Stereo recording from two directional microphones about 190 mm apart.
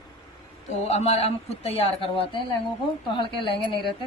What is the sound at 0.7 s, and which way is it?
A woman's voice, 35° left (ahead or behind).